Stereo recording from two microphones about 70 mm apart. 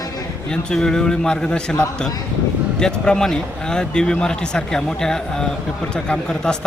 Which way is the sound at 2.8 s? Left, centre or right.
Centre.